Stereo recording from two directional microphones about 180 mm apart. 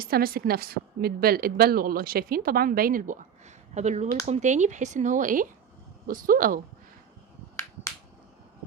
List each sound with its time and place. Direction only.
0.0 s a woman's voice: 55° right (ahead or behind)